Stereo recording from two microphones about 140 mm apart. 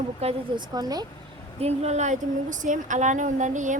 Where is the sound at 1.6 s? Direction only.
50° right (ahead or behind).